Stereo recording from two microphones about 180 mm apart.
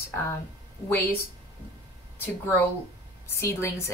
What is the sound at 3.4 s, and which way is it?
Speech, 15° left (ahead or behind).